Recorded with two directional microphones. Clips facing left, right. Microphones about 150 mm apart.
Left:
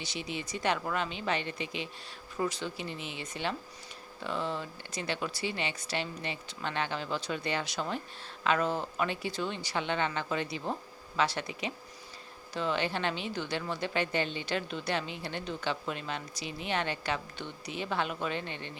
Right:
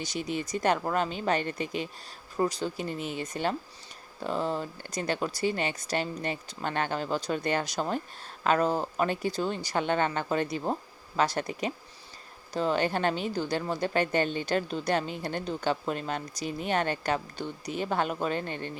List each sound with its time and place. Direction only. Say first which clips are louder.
0.0 s speech: right 6 dB; 45° right (ahead or behind)